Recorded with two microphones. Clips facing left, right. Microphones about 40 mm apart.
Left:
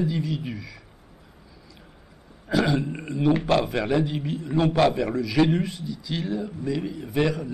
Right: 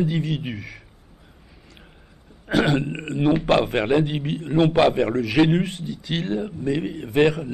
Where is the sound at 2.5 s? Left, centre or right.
Right.